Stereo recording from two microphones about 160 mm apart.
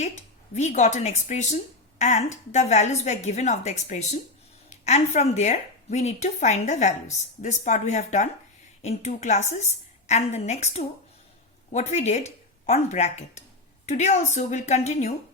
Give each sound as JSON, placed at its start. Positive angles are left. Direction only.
{"t": 0.0, "sound": "a woman's voice", "side_deg": 45}